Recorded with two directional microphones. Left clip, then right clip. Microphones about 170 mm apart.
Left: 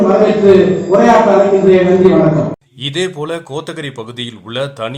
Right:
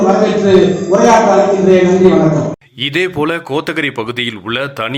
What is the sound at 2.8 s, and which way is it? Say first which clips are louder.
Speech: right 4 dB; 15° right (ahead or behind).